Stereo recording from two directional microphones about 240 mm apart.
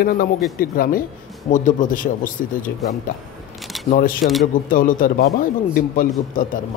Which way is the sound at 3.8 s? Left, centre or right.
Left.